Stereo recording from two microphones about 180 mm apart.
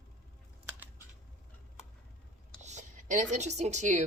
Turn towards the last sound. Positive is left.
turn(degrees=-40)  # may be behind; listen again after turning